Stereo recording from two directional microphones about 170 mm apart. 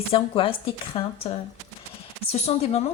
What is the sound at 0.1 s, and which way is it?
Speech, 35° left (ahead or behind).